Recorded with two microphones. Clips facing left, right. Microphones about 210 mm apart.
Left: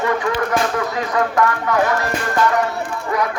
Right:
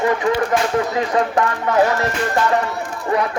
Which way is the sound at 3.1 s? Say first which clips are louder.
Right 2 dB; 25° right (ahead or behind).